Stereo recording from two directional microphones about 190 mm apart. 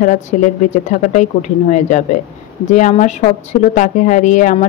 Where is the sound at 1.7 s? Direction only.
40° left (ahead or behind).